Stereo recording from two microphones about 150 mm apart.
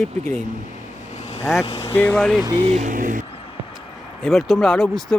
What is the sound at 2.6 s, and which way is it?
Speech, 40° right (ahead or behind).